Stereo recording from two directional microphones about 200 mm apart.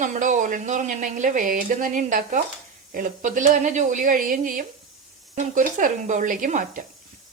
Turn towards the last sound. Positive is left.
turn(degrees=-40)  # may be behind; listen again after turning